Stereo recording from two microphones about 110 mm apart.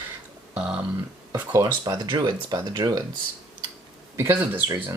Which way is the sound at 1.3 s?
40° right (ahead or behind).